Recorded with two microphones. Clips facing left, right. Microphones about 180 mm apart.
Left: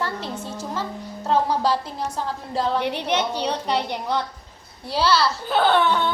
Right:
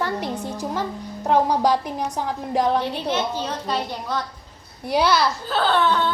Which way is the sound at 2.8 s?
15° left (ahead or behind).